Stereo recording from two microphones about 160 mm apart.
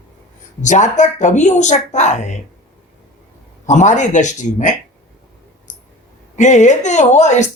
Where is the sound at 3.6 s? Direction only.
50° left (ahead or behind).